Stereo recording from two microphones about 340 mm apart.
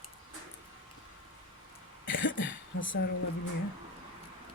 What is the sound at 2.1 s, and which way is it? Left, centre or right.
Cough, left.